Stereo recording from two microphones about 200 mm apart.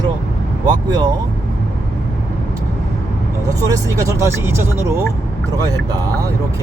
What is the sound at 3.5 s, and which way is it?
Speech, 15° right (ahead or behind).